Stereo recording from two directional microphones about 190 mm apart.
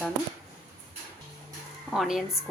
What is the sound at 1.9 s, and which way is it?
Speech, centre (ahead or behind).